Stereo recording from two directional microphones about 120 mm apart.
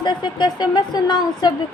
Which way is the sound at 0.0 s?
35° left (ahead or behind).